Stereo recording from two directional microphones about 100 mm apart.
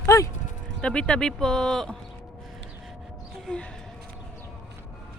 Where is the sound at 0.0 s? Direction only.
30° left (ahead or behind).